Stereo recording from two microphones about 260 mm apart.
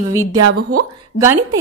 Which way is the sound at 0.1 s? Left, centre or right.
Centre.